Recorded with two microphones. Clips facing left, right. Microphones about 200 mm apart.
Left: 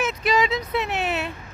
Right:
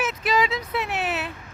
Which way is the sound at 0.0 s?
5° right (ahead or behind).